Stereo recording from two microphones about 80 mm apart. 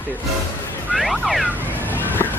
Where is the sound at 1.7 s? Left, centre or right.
Left.